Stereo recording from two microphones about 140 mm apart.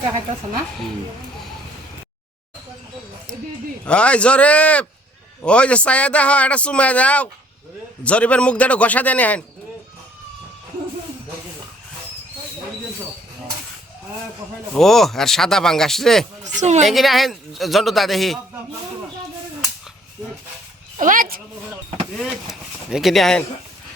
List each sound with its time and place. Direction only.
3.8 s speech: 10° left (ahead or behind)
14.8 s speech: centre (ahead or behind)
16.6 s a woman's voice: 55° right (ahead or behind)
16.8 s speech: centre (ahead or behind)
20.9 s speech: 70° right (ahead or behind); by 21.4 s 85° right
22.2 s speech: centre (ahead or behind)